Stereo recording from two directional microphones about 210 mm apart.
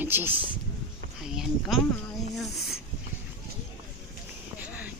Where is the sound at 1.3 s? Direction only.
Centre (ahead or behind).